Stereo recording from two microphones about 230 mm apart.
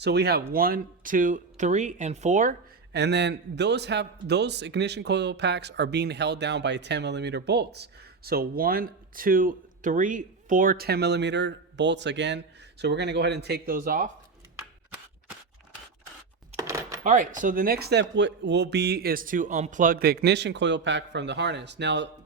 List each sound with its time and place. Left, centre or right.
0.0 s speech: right
16.6 s a sound: centre
17.0 s speech: right